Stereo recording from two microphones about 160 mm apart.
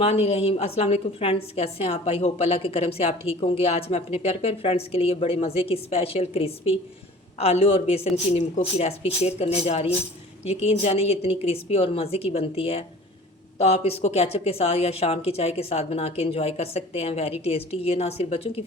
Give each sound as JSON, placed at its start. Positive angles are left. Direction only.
{"t": 0.0, "sound": "a woman's voice", "side_deg": 40}